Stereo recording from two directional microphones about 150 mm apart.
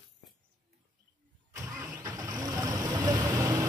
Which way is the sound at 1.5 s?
20° right (ahead or behind).